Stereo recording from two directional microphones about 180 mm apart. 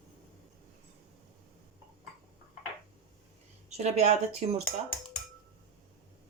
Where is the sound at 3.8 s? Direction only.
40° right (ahead or behind).